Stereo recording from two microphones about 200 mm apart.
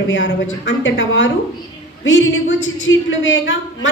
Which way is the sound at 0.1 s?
65° left (ahead or behind).